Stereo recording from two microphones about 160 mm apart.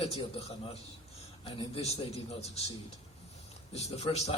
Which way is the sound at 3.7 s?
40° left (ahead or behind).